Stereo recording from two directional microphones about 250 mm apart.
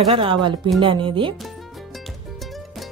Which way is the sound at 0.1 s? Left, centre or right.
Right.